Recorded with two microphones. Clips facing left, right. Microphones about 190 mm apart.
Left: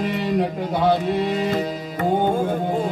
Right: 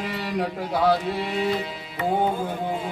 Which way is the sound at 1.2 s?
40° left (ahead or behind).